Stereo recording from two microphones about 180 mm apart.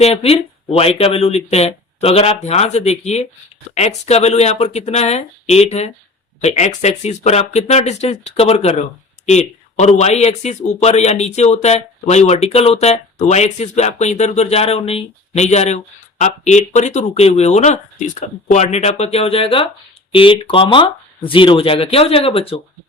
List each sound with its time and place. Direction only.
0.0 s speech: 35° left (ahead or behind)